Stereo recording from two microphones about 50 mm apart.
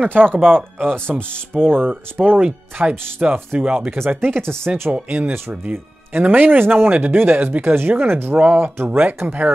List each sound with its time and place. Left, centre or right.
0.0 s speech: right
0.7 s speech: centre
1.1 s speech: right
2.4 s speech: right
3.9 s speech: right
4.9 s speech: right
8.4 s speech: right
8.7 s speech: right
9.0 s speech: right